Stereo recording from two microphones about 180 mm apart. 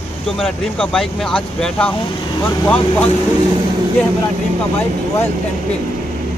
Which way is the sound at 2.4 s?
20° left (ahead or behind).